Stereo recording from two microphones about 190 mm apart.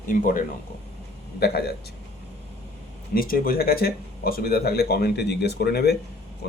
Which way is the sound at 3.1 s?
50° left (ahead or behind).